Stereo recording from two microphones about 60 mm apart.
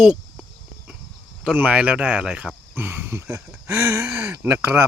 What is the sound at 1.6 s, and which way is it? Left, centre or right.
Speech, right.